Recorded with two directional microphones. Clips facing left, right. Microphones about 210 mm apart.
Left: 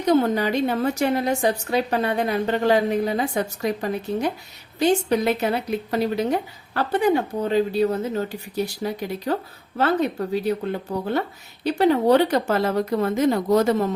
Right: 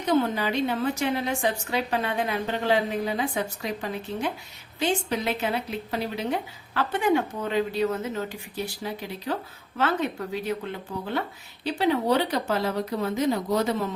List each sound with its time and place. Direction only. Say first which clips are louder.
0.0 s speech: left 5 dB; 40° left (ahead or behind)